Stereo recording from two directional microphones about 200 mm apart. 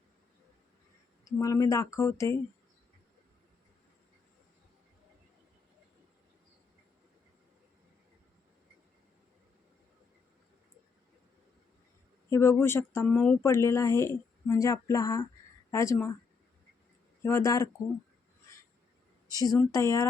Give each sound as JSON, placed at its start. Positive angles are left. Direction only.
{"t": 1.2, "sound": "speech", "side_deg": 15}
{"t": 12.3, "sound": "speech", "side_deg": 15}
{"t": 17.2, "sound": "speech", "side_deg": 15}
{"t": 19.4, "sound": "speech", "side_deg": 15}